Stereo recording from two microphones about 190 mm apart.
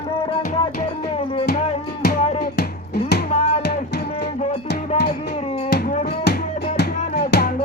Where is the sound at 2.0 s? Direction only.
55° left (ahead or behind).